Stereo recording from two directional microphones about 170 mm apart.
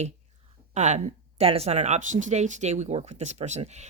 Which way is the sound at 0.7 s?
45° right (ahead or behind).